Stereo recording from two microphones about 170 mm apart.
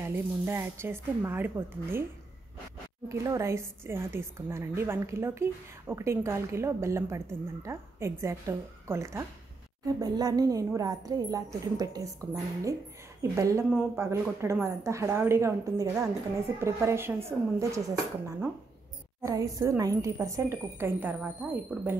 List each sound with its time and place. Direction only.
0.0 s a woman's voice: 15° right (ahead or behind)
3.1 s a woman's voice: 15° right (ahead or behind)
19.2 s a woman's voice: 20° right (ahead or behind)